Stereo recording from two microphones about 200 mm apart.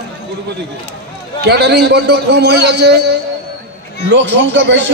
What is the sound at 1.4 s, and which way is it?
A man's voice, 55° right (ahead or behind).